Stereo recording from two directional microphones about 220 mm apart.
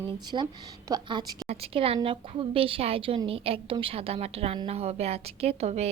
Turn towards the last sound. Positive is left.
turn(degrees=-30)  # may be behind; listen again after turning